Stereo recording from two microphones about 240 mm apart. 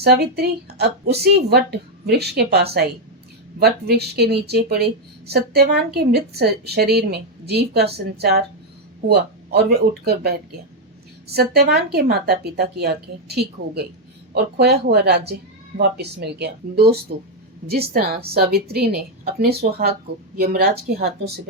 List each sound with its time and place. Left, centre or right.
0.0 s speech: right